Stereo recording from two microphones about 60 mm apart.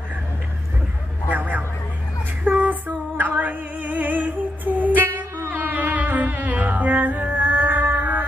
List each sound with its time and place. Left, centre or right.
1.3 s a sound: right
2.4 s female singing: right
5.5 s music: right